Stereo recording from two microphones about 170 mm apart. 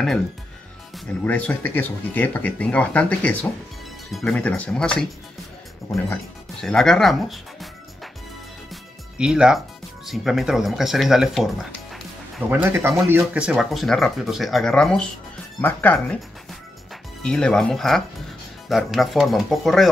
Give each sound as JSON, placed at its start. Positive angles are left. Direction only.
{"t": 0.9, "sound": "speech", "side_deg": 10}
{"t": 6.6, "sound": "speech", "side_deg": 5}
{"t": 9.2, "sound": "speech", "side_deg": -5}
{"t": 12.4, "sound": "speech", "side_deg": -15}
{"t": 17.2, "sound": "speech", "side_deg": 5}